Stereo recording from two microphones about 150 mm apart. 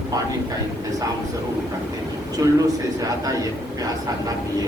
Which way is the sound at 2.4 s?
20° right (ahead or behind).